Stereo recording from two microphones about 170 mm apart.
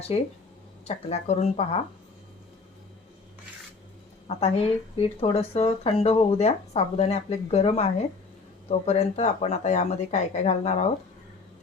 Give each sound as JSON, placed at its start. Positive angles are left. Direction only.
{"t": 0.9, "sound": "speech", "side_deg": 40}
{"t": 4.3, "sound": "speech", "side_deg": 35}
{"t": 8.9, "sound": "speech", "side_deg": 40}